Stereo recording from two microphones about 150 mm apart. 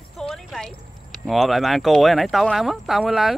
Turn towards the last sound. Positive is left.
turn(degrees=0)  # may be behind; listen again after turning